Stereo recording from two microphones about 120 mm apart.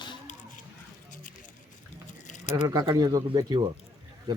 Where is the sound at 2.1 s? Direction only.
85° left.